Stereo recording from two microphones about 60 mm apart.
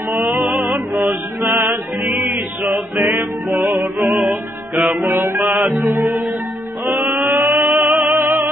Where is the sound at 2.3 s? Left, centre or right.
Right.